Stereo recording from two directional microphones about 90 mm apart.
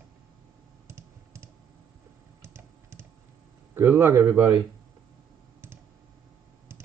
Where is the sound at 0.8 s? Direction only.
30° right (ahead or behind).